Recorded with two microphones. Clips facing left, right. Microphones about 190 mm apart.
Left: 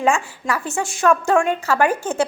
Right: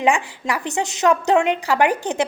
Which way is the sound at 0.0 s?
15° right (ahead or behind).